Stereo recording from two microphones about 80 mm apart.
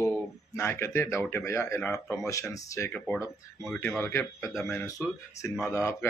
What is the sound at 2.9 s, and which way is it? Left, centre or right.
A man's voice, left.